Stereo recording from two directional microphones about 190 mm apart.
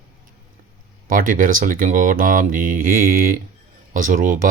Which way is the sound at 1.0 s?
45° right (ahead or behind).